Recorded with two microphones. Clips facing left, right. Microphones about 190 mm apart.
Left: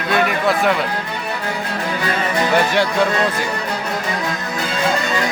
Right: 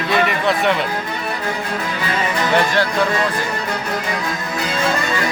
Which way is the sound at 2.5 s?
15° left (ahead or behind).